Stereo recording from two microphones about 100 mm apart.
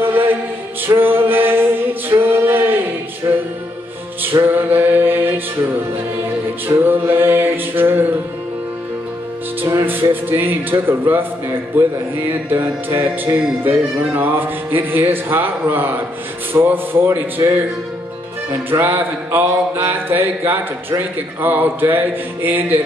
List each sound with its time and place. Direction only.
0.0 s chant: 20° right (ahead or behind)
0.8 s mantra: 20° right (ahead or behind)
4.2 s music: 20° right (ahead or behind)
9.6 s music: 25° right (ahead or behind)
18.7 s music: 20° right (ahead or behind)